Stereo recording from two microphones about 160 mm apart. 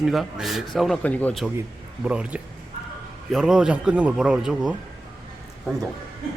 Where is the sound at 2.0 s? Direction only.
5° right (ahead or behind).